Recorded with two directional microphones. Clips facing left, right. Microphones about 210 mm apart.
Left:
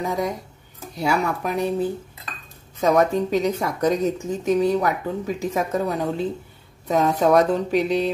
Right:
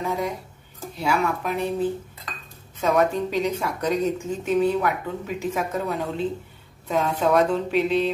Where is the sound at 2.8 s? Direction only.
40° left (ahead or behind).